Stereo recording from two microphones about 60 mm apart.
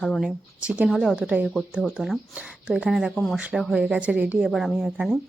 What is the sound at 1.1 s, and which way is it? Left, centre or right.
Speech, centre.